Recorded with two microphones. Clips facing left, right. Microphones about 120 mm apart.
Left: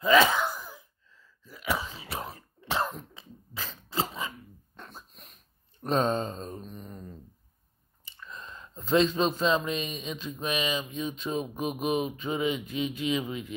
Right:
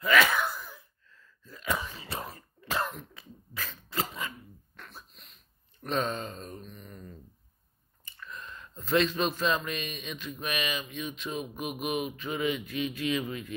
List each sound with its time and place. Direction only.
0.0 s gasp: 30° left (ahead or behind)
1.1 s sneeze: 10° left (ahead or behind)
2.6 s cough: 20° left (ahead or behind)
3.2 s dog: 20° left (ahead or behind)
4.7 s a sound: 25° left (ahead or behind)
5.2 s a sound: 35° left (ahead or behind)
8.3 s a man's voice: 30° left (ahead or behind)